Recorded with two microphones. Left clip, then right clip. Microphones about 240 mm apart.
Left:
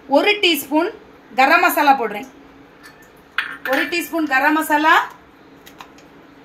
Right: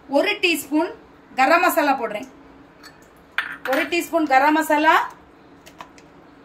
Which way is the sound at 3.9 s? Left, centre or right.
Centre.